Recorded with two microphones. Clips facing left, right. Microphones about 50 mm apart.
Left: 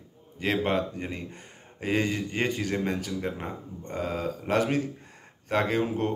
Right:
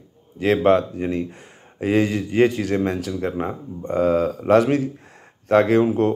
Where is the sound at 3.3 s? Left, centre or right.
Right.